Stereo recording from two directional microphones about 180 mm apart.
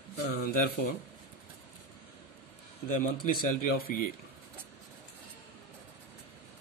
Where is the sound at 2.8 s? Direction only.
50° left (ahead or behind).